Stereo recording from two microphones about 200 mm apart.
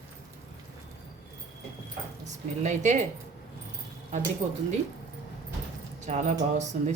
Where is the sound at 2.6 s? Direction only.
35° right (ahead or behind).